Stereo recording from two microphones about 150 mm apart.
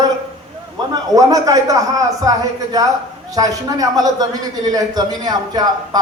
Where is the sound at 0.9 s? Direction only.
25° right (ahead or behind).